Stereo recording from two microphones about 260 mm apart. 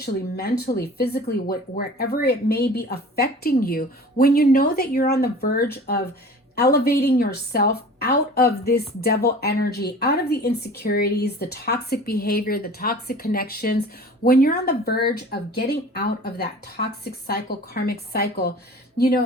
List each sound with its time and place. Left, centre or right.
0.0 s a woman's voice: left